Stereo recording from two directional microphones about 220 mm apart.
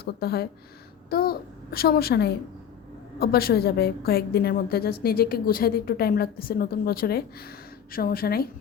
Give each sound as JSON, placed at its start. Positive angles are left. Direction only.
{"t": 0.0, "sound": "a woman's voice", "side_deg": 45}